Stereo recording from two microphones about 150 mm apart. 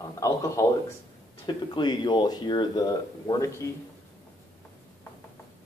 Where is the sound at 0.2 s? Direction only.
20° left (ahead or behind).